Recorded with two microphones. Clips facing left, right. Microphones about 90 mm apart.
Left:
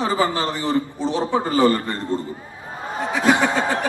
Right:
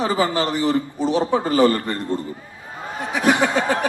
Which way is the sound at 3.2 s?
20° left (ahead or behind).